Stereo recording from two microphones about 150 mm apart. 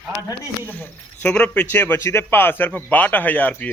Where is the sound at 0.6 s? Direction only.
10° left (ahead or behind).